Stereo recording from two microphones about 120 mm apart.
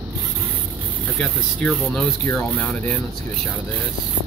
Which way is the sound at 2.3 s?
20° left (ahead or behind).